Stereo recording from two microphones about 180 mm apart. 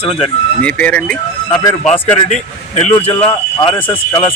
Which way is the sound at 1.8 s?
30° left (ahead or behind).